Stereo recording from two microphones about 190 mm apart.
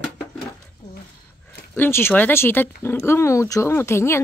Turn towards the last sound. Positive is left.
turn(degrees=15)  # may be behind; listen again after turning